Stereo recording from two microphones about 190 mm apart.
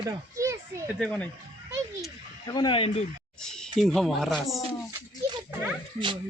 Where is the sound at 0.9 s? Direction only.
5° left (ahead or behind).